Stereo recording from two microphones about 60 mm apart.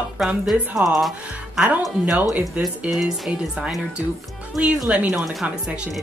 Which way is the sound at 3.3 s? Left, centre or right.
Centre.